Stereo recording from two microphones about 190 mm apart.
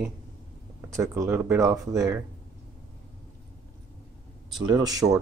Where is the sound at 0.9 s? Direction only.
15° right (ahead or behind).